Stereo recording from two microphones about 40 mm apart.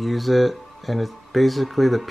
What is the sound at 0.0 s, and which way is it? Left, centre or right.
Speech, centre.